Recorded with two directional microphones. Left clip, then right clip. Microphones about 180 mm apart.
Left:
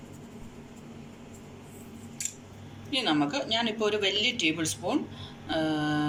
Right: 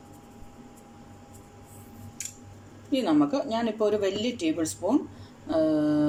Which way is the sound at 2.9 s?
50° right (ahead or behind).